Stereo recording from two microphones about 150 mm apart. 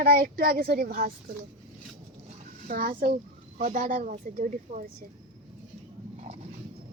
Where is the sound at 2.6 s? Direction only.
65° right (ahead or behind).